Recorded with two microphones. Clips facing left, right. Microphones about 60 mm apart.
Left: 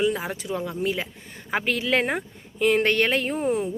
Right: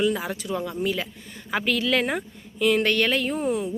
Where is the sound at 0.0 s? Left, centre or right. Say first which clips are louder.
Even; left.